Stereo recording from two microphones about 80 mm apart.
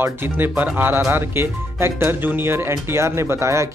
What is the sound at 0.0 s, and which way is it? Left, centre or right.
Speech, right.